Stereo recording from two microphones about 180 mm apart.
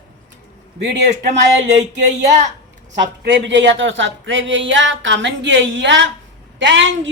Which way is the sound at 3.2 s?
85° right.